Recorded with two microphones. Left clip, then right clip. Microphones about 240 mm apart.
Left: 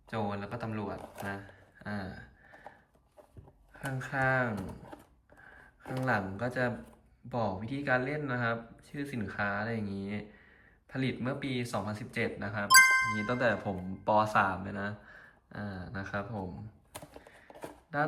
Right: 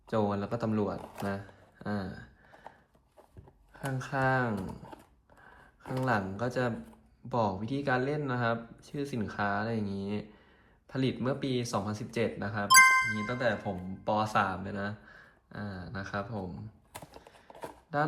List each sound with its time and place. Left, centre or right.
0.1 s speech: centre
3.8 s speech: centre
4.5 s a sound: centre
5.8 s speech: centre
12.6 s speech: centre
16.9 s typing: centre